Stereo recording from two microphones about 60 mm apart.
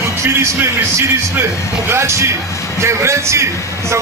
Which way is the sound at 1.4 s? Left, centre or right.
Right.